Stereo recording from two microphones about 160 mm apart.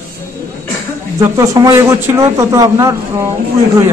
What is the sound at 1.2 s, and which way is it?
A man's voice, 20° right (ahead or behind).